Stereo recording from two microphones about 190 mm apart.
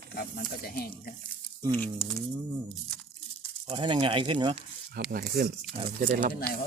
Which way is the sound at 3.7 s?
25° right (ahead or behind).